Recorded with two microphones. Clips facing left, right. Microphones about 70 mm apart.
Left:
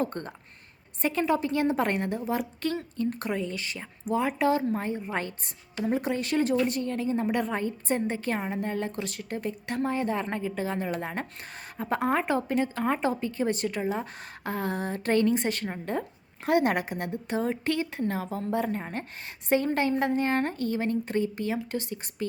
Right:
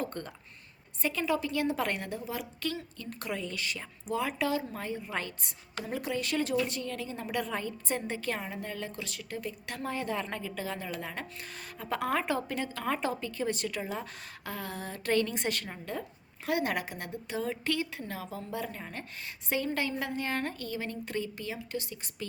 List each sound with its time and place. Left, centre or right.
0.0 s a woman's voice: left